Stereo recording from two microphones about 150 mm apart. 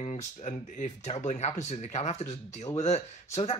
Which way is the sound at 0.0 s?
50° left (ahead or behind).